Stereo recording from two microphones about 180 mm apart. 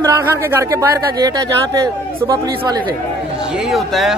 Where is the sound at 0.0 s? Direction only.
15° right (ahead or behind).